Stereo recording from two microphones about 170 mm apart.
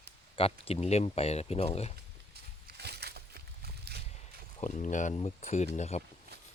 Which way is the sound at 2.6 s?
70° right (ahead or behind).